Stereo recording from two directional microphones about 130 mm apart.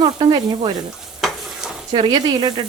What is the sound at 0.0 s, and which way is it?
Speech, 35° right (ahead or behind).